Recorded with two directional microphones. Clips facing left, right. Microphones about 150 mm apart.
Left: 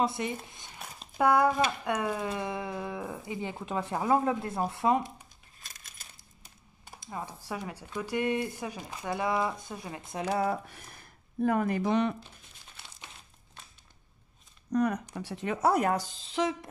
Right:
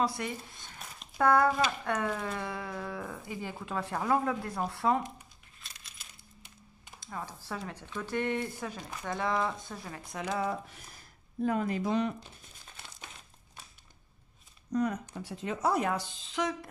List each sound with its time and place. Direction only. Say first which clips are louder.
0.0 s speech: left 2 dB; 20° left (ahead or behind)
5.6 s coin: left 1 dB; 45° left (ahead or behind)
7.0 s speech: left 2 dB; 15° left (ahead or behind)
10.0 s speech: left 4 dB; 30° left (ahead or behind)
10.5 s speech: left 3 dB; 60° left (ahead or behind); by 12.2 s 75° left (ahead or behind)
14.7 s speech: left 3 dB; 65° left (ahead or behind); by 16.5 s 30° left (ahead or behind)